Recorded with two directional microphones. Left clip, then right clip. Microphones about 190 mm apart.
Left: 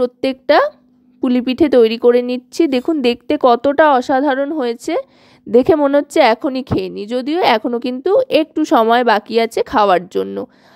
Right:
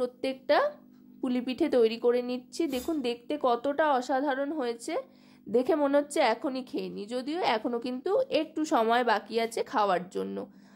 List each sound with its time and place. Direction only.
0.0 s a woman's voice: 40° left (ahead or behind)